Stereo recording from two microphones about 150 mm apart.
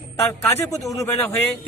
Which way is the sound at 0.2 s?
15° left (ahead or behind).